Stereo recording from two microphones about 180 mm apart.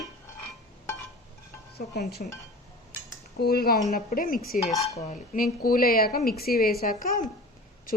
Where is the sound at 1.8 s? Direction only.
50° left (ahead or behind).